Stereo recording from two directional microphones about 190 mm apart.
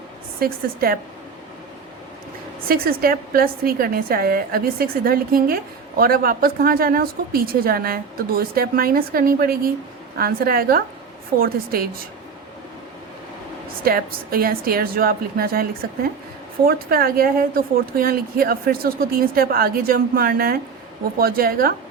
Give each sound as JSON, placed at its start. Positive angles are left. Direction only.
{"t": 0.3, "sound": "a woman's voice", "side_deg": -50}
{"t": 2.6, "sound": "a woman's voice", "side_deg": -50}
{"t": 13.8, "sound": "a woman's voice", "side_deg": -50}
{"t": 16.6, "sound": "a woman's voice", "side_deg": -50}